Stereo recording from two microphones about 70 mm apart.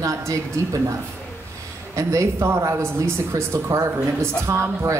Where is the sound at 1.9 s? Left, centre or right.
Right.